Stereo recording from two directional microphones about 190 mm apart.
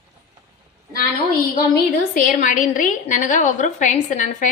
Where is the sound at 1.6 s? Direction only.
50° left (ahead or behind).